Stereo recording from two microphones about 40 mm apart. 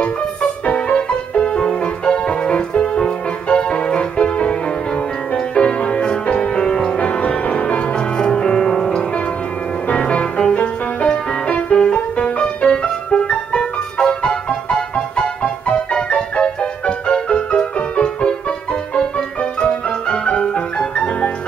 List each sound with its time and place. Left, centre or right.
0.7 s music: left
9.8 s music: left
15.0 s music: centre
15.6 s music: left